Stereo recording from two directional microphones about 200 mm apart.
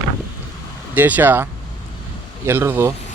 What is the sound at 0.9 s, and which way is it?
Speech, 10° right (ahead or behind).